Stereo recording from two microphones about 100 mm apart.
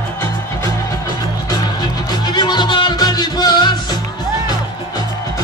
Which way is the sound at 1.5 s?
40° left (ahead or behind).